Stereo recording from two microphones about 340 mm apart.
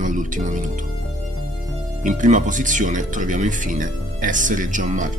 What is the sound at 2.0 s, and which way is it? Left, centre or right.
Speech, right.